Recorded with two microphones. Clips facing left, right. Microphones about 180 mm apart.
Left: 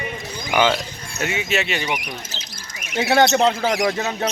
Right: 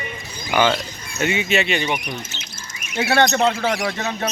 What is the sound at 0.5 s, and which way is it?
Speech, 15° left (ahead or behind).